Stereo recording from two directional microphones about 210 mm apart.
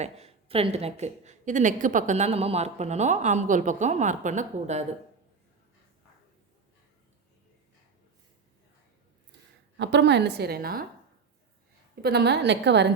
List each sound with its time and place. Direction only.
0.0 s a woman's voice: 30° right (ahead or behind)
9.7 s a woman's voice: 55° right (ahead or behind)
12.0 s a woman's voice: 50° right (ahead or behind)